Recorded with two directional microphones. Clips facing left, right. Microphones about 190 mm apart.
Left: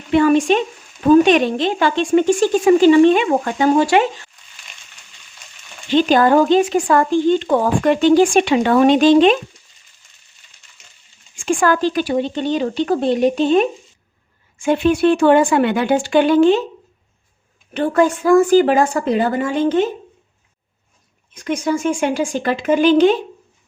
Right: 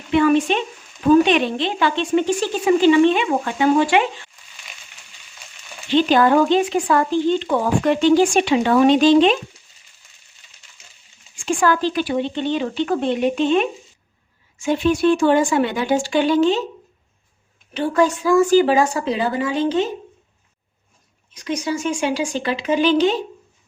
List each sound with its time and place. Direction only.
0.1 s speech: 40° left (ahead or behind)
5.9 s speech: 45° left (ahead or behind)
11.3 s speech: 50° left (ahead or behind)
14.6 s speech: 55° left (ahead or behind)
17.7 s speech: 55° left (ahead or behind)
21.3 s speech: 50° left (ahead or behind)